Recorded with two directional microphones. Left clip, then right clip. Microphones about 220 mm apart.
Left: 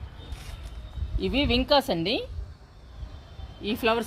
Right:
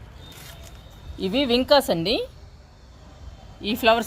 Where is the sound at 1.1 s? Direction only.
40° right (ahead or behind).